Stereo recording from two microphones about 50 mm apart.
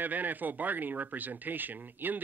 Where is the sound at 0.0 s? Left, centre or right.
Right.